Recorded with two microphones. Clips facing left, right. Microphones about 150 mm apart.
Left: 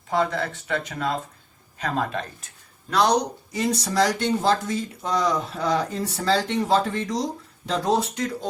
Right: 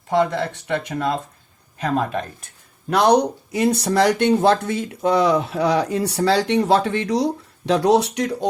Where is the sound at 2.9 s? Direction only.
60° right (ahead or behind).